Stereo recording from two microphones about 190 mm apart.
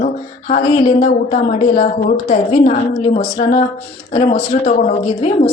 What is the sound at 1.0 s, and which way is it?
A woman's voice, 35° left (ahead or behind).